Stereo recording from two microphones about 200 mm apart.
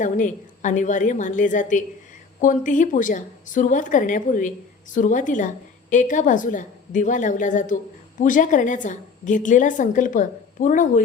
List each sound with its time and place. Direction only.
0.0 s a woman's voice: 40° left (ahead or behind)